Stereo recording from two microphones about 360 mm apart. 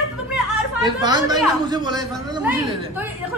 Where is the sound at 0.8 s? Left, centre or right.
Centre.